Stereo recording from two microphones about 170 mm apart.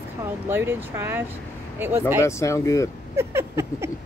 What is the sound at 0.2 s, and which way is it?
A woman's voice, 15° right (ahead or behind).